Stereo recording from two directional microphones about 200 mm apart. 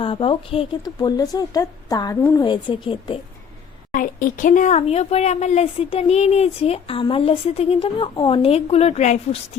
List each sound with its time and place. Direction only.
0.0 s a woman's voice: 25° left (ahead or behind)
3.9 s speech: 45° left (ahead or behind)